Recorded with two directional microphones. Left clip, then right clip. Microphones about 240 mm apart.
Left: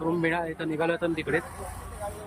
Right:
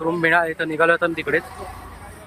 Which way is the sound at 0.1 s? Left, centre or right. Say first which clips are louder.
Right 11 dB; centre.